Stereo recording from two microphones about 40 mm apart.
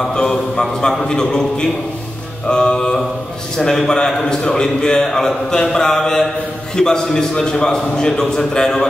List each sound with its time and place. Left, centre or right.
0.1 s a man's voice: centre
2.4 s mantra: centre
3.5 s a man's voice: centre